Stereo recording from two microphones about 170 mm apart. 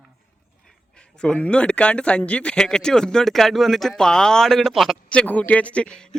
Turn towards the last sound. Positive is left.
turn(degrees=5)  # may be behind; listen again after turning